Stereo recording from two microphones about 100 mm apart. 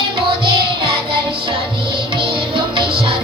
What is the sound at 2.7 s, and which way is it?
Music, 65° right (ahead or behind).